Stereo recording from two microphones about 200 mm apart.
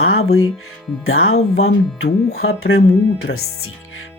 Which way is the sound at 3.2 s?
90° left.